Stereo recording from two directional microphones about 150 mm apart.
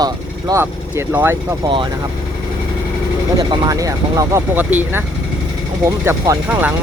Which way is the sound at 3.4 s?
25° right (ahead or behind).